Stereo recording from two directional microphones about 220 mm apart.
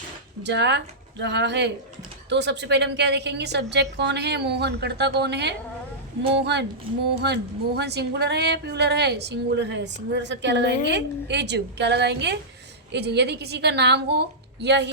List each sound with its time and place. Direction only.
0.4 s a woman's voice: 50° right (ahead or behind)